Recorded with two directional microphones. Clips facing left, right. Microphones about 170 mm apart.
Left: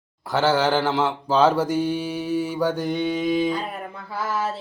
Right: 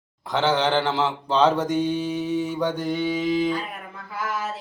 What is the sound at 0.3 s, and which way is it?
Mantra, 5° left (ahead or behind).